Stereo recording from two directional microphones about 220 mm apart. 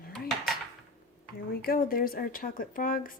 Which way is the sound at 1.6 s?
40° left (ahead or behind).